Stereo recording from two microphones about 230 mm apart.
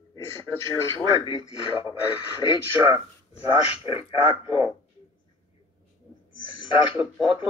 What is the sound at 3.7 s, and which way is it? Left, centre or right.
Speech, left.